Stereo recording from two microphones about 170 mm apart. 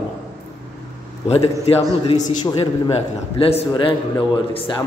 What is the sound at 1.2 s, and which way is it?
A woman's voice, 35° left (ahead or behind).